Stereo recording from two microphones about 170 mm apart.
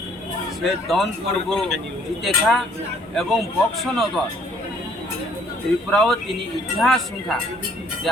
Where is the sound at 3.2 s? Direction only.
Centre (ahead or behind).